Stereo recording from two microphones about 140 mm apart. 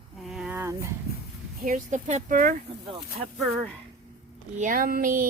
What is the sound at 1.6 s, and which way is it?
Speech, 60° right (ahead or behind).